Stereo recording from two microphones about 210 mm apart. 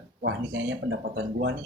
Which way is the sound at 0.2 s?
55° right (ahead or behind).